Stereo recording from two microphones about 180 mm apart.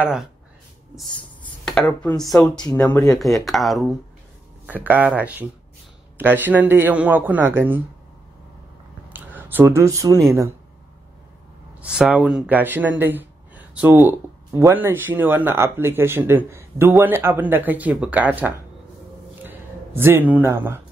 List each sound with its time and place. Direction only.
0.0 s speech: 5° right (ahead or behind)
9.1 s speech: 10° right (ahead or behind)
11.8 s speech: 5° right (ahead or behind)
20.0 s speech: 10° right (ahead or behind)